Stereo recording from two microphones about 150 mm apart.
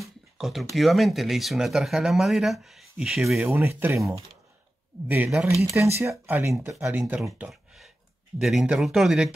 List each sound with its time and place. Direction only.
0.0 s a sound: centre (ahead or behind)
0.7 s speech: centre (ahead or behind)
3.4 s speech: 15° right (ahead or behind)
5.0 s speech: 10° right (ahead or behind)
7.2 s speech: 5° right (ahead or behind)